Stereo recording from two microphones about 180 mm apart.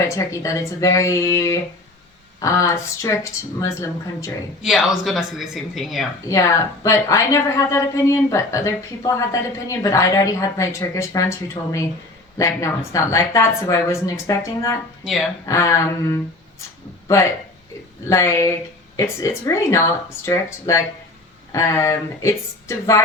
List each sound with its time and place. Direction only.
0.1 s a woman's voice: 15° left (ahead or behind)
4.6 s speech: centre (ahead or behind)
6.2 s a woman's voice: 15° left (ahead or behind)
15.0 s speech: centre (ahead or behind)
15.4 s a woman's voice: 15° left (ahead or behind)
18.1 s a woman's voice: 15° left (ahead or behind)